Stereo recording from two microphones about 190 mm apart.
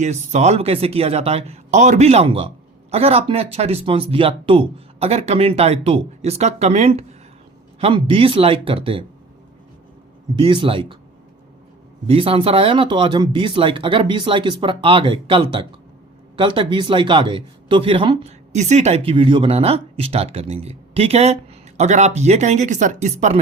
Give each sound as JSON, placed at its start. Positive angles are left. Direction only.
{"t": 0.0, "sound": "speech", "side_deg": -35}
{"t": 10.3, "sound": "speech", "side_deg": -25}
{"t": 12.0, "sound": "speech", "side_deg": -30}